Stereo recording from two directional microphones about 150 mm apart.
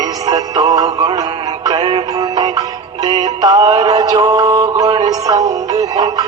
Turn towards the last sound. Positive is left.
turn(degrees=-25)  # may be behind; listen again after turning